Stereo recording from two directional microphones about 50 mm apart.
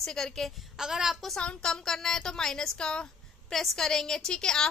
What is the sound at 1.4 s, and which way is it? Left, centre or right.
A woman's voice, centre.